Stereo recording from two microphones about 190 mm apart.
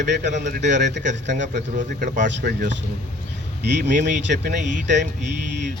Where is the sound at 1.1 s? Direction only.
70° right (ahead or behind).